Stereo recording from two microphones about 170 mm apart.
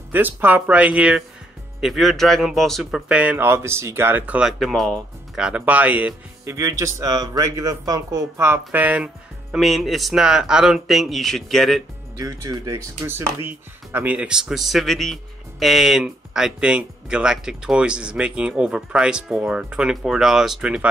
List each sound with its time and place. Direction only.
0.1 s speech: 10° right (ahead or behind)
12.2 s speech: 20° right (ahead or behind); by 20.9 s 5° right (ahead or behind)